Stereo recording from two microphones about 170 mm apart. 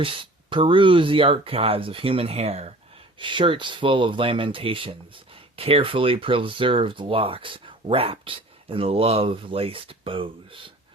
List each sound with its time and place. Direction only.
0.0 s speech: 30° right (ahead or behind)